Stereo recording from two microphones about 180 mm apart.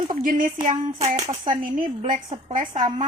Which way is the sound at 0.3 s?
50° right (ahead or behind).